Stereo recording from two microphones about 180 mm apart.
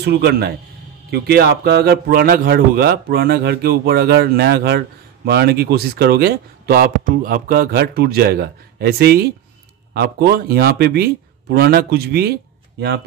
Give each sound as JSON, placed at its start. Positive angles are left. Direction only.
{"t": 0.0, "sound": "a man's voice", "side_deg": -65}